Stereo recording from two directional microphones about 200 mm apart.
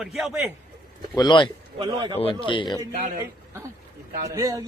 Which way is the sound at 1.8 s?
25° right (ahead or behind).